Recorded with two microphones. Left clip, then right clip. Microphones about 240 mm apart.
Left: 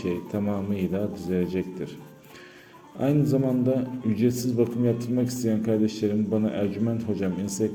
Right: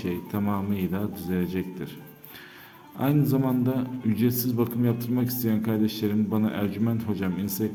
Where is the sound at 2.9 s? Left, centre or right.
Centre.